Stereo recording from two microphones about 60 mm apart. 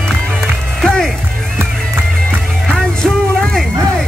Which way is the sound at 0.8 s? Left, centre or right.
Centre.